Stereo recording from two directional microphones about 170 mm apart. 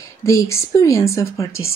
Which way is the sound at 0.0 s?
20° left (ahead or behind).